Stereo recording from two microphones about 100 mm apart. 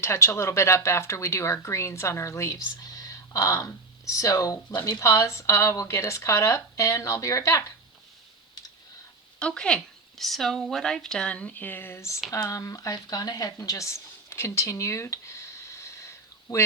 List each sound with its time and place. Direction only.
0.0 s a woman's voice: 25° left (ahead or behind)
9.4 s a woman's voice: 10° left (ahead or behind); by 16.6 s 30° left (ahead or behind)